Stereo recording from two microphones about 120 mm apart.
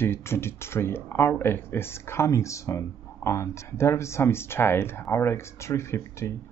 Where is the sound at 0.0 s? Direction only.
20° left (ahead or behind).